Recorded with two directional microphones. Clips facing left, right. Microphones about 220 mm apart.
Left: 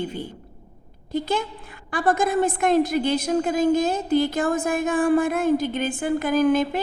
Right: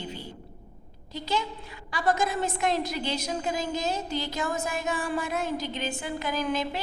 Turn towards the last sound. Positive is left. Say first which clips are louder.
# left 10 dB
turn(degrees=50)  # may be behind; listen again after turning